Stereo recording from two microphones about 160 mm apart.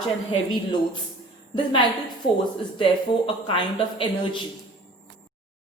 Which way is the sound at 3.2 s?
30° left (ahead or behind).